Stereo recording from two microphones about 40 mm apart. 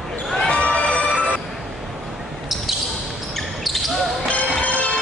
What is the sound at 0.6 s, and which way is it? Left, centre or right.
Music, left.